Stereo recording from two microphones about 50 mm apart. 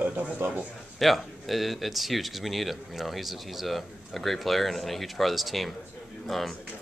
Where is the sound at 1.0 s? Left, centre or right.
Centre.